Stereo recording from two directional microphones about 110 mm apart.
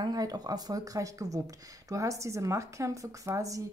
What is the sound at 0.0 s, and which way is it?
Speech, 35° right (ahead or behind).